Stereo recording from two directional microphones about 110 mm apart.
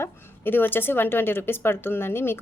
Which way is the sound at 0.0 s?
20° left (ahead or behind).